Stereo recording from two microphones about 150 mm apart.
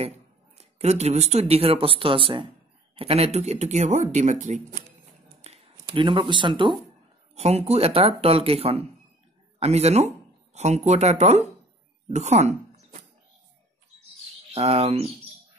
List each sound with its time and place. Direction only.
0.6 s speech: 45° right (ahead or behind)
5.4 s speech: 40° right (ahead or behind)
7.3 s speech: 45° right (ahead or behind)
14.5 s speech: 40° right (ahead or behind)